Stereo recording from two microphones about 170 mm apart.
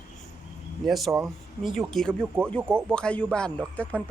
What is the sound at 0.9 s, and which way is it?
A man's voice, centre (ahead or behind).